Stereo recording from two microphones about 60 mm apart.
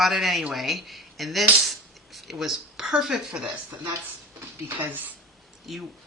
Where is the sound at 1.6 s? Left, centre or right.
Centre.